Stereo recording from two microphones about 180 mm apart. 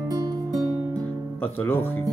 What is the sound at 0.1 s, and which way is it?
Music, 20° right (ahead or behind).